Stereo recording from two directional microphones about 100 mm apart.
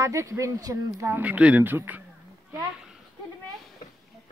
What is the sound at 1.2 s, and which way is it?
Speech, 15° right (ahead or behind).